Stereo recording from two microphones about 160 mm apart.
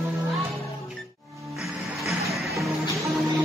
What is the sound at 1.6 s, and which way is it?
Music, centre (ahead or behind).